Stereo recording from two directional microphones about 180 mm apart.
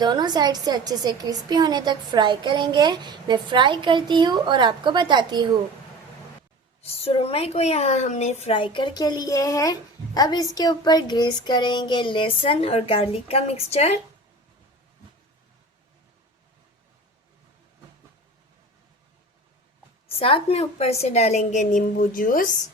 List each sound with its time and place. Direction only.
0.0 s a woman's voice: 25° right (ahead or behind)
6.8 s speech: 35° left (ahead or behind); by 9.7 s 20° left (ahead or behind)
10.2 s a sound: 20° left (ahead or behind)
20.1 s speech: 30° left (ahead or behind); by 22.4 s 50° left (ahead or behind)